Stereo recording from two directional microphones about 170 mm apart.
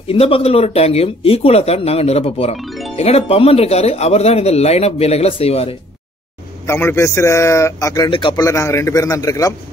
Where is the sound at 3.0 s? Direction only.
35° left (ahead or behind).